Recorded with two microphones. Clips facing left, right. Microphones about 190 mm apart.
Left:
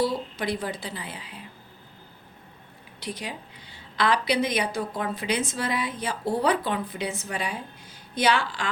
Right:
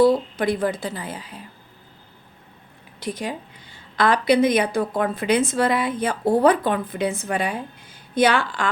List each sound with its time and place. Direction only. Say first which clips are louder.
0.0 s a woman's voice: right 9 dB; 50° right (ahead or behind)
3.0 s a woman's voice: right 7 dB; 50° right (ahead or behind)